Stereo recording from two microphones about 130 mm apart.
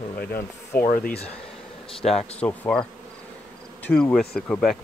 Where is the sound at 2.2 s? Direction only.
10° left (ahead or behind).